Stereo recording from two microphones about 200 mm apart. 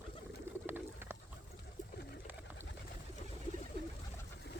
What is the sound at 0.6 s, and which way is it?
Bird, 10° right (ahead or behind).